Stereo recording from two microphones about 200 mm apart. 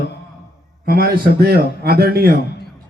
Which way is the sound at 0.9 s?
50° right (ahead or behind).